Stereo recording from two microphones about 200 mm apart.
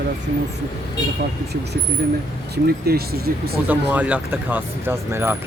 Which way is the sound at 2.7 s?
50° right (ahead or behind).